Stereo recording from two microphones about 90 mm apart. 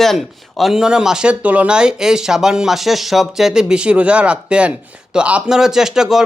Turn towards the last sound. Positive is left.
turn(degrees=-5)  # may be behind; listen again after turning